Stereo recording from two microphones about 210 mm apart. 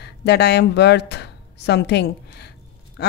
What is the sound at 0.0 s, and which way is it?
Speech, 50° left (ahead or behind).